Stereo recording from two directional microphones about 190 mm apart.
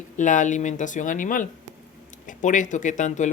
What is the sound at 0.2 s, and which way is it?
Speech, 40° left (ahead or behind).